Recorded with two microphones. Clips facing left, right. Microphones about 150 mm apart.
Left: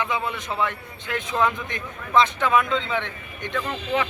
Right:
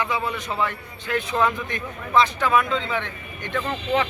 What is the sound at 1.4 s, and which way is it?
Speech, centre (ahead or behind).